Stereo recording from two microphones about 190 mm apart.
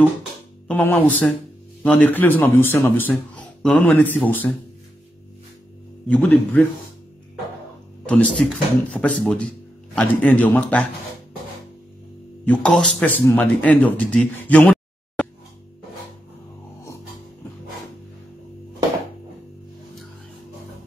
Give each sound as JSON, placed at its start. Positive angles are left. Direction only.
{"t": 0.7, "sound": "speech", "side_deg": 10}
{"t": 6.0, "sound": "speech", "side_deg": 10}
{"t": 8.1, "sound": "speech", "side_deg": 5}
{"t": 12.4, "sound": "speech", "side_deg": 5}